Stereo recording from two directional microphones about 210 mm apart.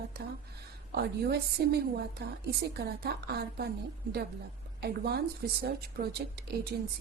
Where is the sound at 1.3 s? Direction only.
50° right (ahead or behind).